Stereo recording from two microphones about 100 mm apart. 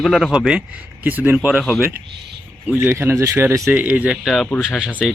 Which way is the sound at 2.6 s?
20° right (ahead or behind).